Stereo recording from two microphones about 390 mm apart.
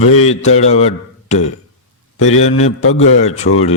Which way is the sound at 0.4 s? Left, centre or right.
Centre.